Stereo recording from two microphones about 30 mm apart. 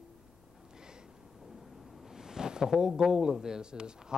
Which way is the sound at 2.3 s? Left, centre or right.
Right.